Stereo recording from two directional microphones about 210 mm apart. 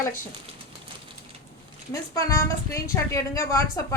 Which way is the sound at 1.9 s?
15° left (ahead or behind).